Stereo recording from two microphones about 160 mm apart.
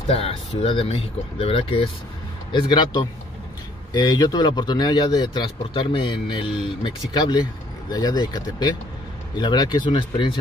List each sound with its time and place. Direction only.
0.6 s speech: 35° left (ahead or behind)